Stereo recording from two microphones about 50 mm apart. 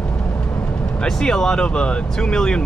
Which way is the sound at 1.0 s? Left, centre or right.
Centre.